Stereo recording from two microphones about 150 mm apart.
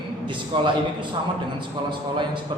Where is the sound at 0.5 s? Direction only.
35° right (ahead or behind).